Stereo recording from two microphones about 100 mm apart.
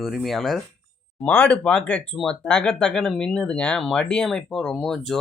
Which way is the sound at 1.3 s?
15° left (ahead or behind).